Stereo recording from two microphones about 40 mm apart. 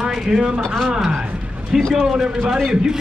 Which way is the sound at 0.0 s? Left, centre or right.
Right.